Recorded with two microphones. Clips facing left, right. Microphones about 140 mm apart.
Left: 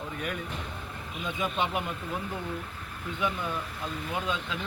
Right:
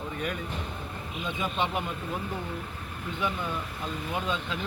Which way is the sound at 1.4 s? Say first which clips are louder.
Even; 10° left (ahead or behind).